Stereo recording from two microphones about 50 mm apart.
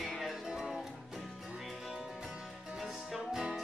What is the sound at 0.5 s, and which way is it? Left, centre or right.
Music, centre.